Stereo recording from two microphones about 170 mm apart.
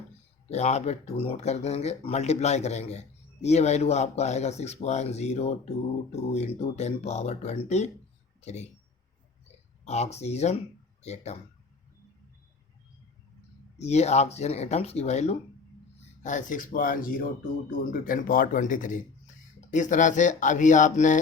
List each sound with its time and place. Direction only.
0.5 s speech: 40° left (ahead or behind)
9.8 s speech: 40° left (ahead or behind)
13.7 s speech: 40° left (ahead or behind)